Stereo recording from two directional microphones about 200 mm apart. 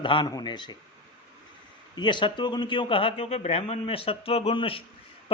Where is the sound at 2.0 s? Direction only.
25° left (ahead or behind).